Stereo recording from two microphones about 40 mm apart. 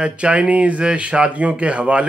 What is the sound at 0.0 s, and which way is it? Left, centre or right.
Speech, right.